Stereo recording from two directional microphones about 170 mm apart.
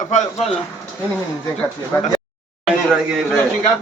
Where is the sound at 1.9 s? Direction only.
15° left (ahead or behind).